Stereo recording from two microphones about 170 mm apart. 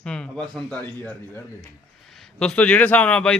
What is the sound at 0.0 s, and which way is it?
A man's voice, 5° left (ahead or behind).